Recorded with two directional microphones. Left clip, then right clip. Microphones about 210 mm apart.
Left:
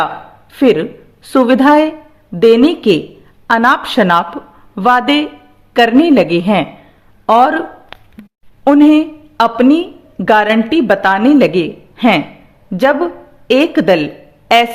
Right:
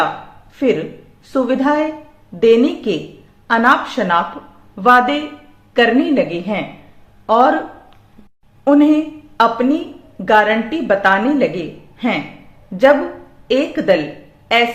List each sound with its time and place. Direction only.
0.5 s a woman's voice: 50° left (ahead or behind)
8.6 s a woman's voice: 50° left (ahead or behind)